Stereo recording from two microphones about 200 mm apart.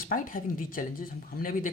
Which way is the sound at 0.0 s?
45° left (ahead or behind).